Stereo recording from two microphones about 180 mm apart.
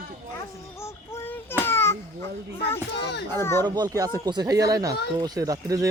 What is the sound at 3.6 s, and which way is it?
Speech, 20° right (ahead or behind).